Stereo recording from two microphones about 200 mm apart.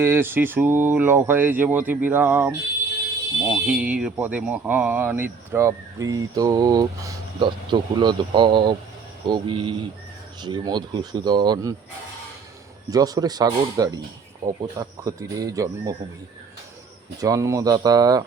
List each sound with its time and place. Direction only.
0.0 s speech: 10° right (ahead or behind)
12.9 s speech: 20° right (ahead or behind)
17.2 s speech: 15° right (ahead or behind)